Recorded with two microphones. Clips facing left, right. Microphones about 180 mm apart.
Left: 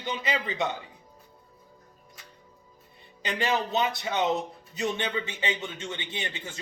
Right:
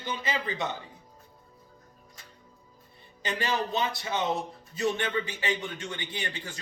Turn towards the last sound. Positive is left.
turn(degrees=20)  # may be behind; listen again after turning